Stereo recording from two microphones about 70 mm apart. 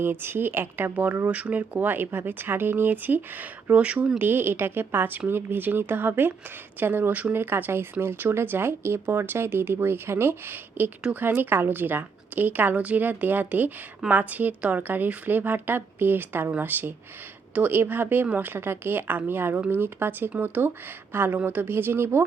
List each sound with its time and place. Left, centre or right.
0.0 s speech: right
1.3 s speech: centre
4.2 s speech: right
7.5 s speech: right